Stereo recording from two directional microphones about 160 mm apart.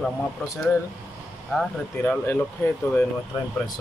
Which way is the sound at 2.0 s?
10° left (ahead or behind).